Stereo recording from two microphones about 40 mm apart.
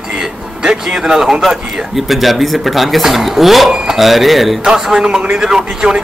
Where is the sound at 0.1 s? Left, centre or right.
Centre.